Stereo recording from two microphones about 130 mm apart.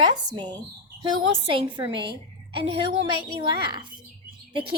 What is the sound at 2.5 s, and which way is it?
A woman's voice, 40° right (ahead or behind).